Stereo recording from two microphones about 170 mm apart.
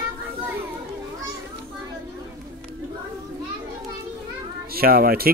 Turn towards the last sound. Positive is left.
turn(degrees=-60)  # may be behind; listen again after turning